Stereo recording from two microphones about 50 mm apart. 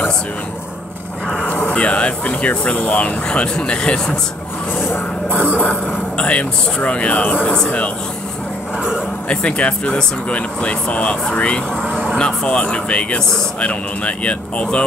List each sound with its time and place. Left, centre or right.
1.4 s speech: left
5.3 s speech: right
5.7 s speech: left
9.3 s speech: left
11.7 s vehicle: right
12.2 s speech: left